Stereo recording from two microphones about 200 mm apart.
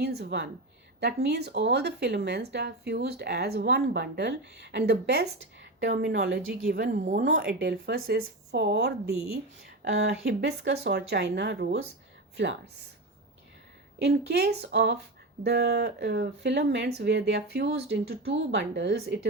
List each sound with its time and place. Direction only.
0.0 s speech: 55° right (ahead or behind)
14.0 s speech: 55° right (ahead or behind)